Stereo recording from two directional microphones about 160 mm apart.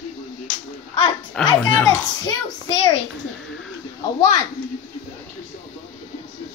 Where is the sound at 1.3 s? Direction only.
5° left (ahead or behind).